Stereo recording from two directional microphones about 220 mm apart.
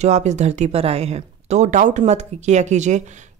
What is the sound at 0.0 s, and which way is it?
Speech, 30° right (ahead or behind).